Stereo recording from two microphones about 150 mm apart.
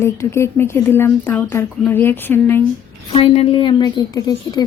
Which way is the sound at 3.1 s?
40° left (ahead or behind).